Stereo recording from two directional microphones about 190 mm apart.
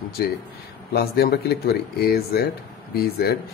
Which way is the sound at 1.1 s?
55° left (ahead or behind).